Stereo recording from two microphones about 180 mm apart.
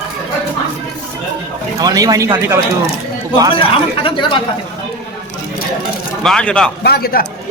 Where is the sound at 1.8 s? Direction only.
20° right (ahead or behind).